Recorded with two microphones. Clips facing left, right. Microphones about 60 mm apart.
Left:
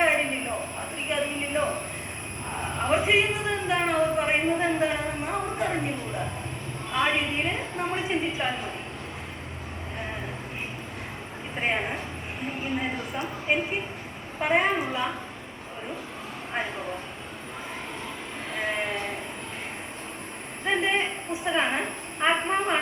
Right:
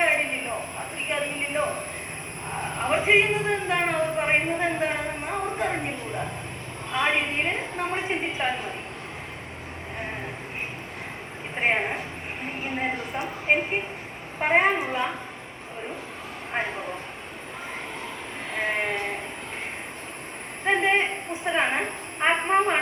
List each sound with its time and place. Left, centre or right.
0.0 s a sound: centre
2.9 s a sound: right
6.9 s a woman's voice: right
8.0 s a woman's voice: right
11.5 s a woman's voice: right
16.5 s a woman's voice: right
18.5 s sheep: right
20.7 s a woman's voice: right